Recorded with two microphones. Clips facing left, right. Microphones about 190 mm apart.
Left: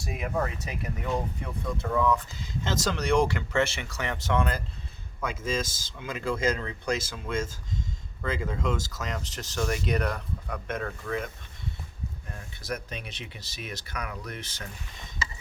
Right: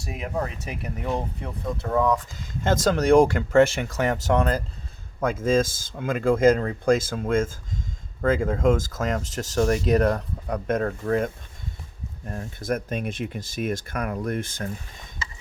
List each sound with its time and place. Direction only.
0.0 s speech: 20° right (ahead or behind)
1.0 s speech: 35° right (ahead or behind)
5.2 s speech: 50° right (ahead or behind)